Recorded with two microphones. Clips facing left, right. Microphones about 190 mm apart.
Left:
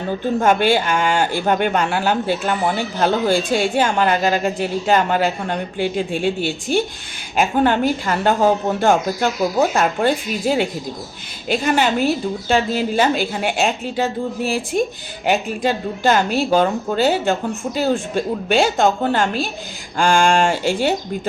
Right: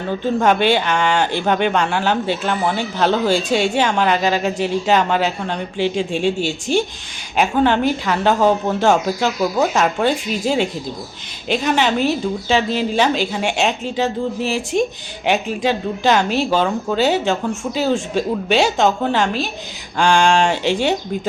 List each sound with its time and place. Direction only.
0.4 s speech: 5° left (ahead or behind)